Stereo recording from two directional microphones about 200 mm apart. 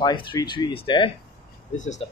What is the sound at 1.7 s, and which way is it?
Speech, 35° left (ahead or behind).